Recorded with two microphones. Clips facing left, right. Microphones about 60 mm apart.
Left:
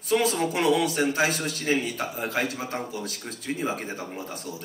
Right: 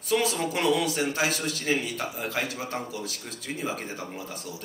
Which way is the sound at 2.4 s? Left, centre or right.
Left.